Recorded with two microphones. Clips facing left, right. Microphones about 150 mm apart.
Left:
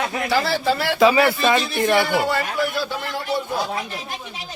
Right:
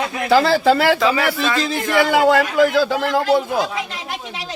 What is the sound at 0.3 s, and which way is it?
Speech, 90° right.